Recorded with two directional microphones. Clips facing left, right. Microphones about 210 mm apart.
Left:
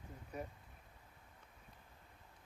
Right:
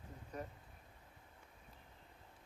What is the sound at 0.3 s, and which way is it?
Speech, 10° left (ahead or behind).